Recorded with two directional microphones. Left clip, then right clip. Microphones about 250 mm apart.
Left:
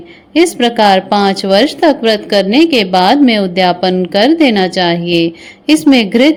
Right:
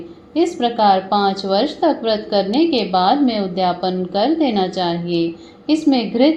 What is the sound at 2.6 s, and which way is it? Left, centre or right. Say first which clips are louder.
Speech: left 7 dB; left.